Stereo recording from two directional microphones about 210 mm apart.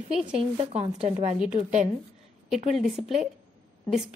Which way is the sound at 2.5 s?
Centre (ahead or behind).